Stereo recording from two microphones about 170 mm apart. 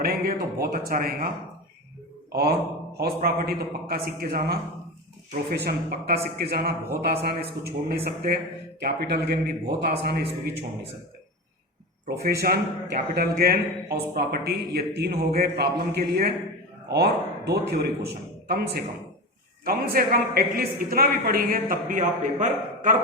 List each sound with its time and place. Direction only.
0.0 s a woman's voice: 65° right (ahead or behind)
2.3 s a man's voice: 65° right (ahead or behind)
12.0 s a man's voice: 65° right (ahead or behind); by 23.0 s 50° right (ahead or behind)